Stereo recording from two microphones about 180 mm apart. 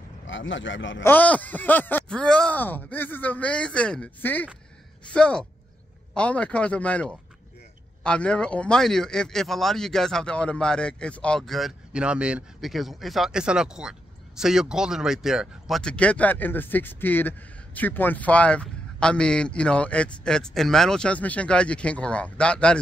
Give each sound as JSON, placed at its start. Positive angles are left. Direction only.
{"t": 0.3, "sound": "a man's voice", "side_deg": 90}
{"t": 1.0, "sound": "speech", "side_deg": 10}